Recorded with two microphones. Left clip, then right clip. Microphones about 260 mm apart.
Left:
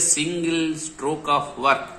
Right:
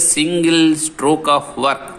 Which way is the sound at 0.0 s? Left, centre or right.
Right.